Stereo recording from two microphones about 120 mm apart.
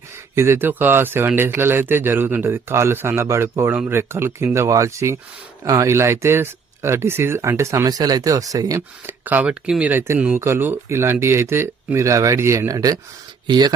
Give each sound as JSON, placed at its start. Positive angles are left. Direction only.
{"t": 0.3, "sound": "speech", "side_deg": -20}
{"t": 9.2, "sound": "speech", "side_deg": -15}